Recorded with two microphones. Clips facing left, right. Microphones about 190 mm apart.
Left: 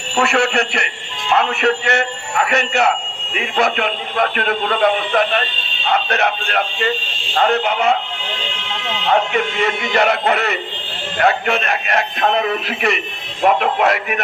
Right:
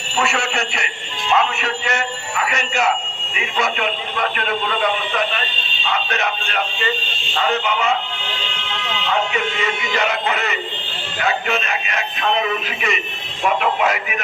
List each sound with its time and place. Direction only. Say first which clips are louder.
0.2 s speech: left 5 dB; 60° left (ahead or behind)
9.0 s speech: left 5 dB; 55° left (ahead or behind)